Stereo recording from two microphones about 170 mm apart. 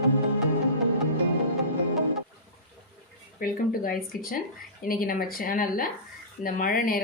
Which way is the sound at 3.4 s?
60° left (ahead or behind).